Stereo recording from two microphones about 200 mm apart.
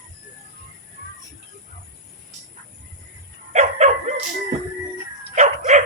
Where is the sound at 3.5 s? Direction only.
35° right (ahead or behind).